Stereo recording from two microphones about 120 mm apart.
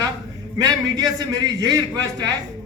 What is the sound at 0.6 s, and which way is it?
A man's voice, 35° right (ahead or behind).